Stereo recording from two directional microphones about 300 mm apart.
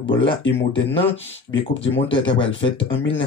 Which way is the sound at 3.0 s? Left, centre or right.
Left.